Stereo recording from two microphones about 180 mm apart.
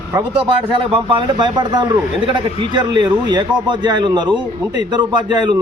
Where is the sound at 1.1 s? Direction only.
25° right (ahead or behind).